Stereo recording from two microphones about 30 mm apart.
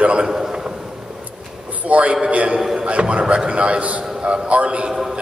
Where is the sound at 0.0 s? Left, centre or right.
Right.